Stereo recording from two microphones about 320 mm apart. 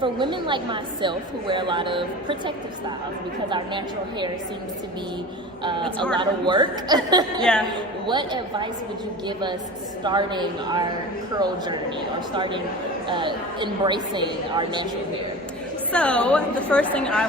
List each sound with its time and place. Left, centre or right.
0.0 s a woman's voice: centre
3.5 s a woman's voice: centre
5.6 s a woman's voice: centre
13.1 s a woman's voice: centre
15.9 s a woman's voice: centre